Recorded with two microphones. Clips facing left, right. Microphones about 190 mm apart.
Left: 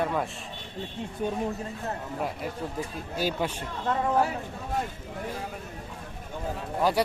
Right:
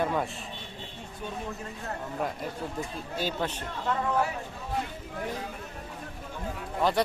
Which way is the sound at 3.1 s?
10° left (ahead or behind).